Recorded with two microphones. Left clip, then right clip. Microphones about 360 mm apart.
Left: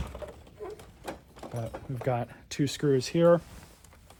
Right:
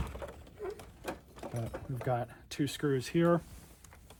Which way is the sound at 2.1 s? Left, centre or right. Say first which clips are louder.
Left 4 dB; centre.